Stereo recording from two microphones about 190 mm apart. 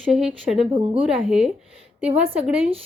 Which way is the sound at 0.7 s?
30° right (ahead or behind).